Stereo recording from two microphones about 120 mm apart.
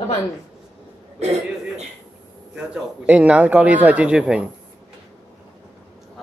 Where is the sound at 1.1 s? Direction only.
65° right (ahead or behind).